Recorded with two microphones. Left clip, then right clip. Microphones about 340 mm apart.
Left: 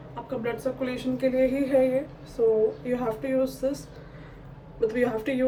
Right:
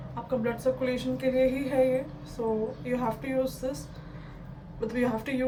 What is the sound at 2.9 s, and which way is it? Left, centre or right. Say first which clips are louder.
Speech: left 3 dB; centre.